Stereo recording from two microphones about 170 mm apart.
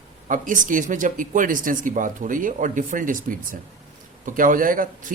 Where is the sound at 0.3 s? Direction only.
50° right (ahead or behind).